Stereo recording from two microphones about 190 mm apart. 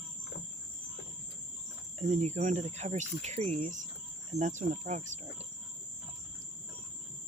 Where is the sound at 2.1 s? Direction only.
35° right (ahead or behind).